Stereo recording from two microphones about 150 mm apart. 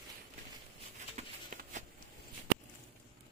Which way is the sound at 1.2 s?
50° right (ahead or behind).